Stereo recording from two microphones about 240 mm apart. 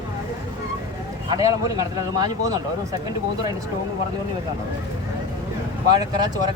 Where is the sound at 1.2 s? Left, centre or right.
Centre.